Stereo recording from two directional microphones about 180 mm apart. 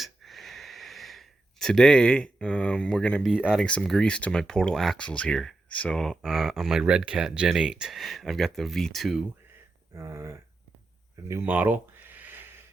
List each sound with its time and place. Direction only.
0.0 s speech: centre (ahead or behind)
9.9 s speech: 15° right (ahead or behind)
11.3 s a sound: 10° right (ahead or behind)